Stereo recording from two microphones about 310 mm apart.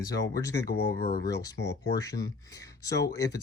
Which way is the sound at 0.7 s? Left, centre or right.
Left.